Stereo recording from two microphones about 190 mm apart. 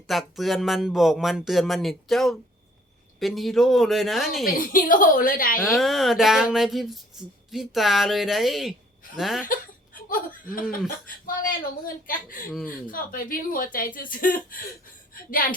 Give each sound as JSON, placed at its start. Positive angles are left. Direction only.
{"t": 0.1, "sound": "speech", "side_deg": 0}
{"t": 4.5, "sound": "speech", "side_deg": 45}
{"t": 5.6, "sound": "speech", "side_deg": 0}
{"t": 9.5, "sound": "speech", "side_deg": 45}